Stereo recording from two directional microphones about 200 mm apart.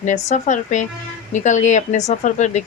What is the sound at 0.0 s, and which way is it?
A woman's voice, 35° left (ahead or behind).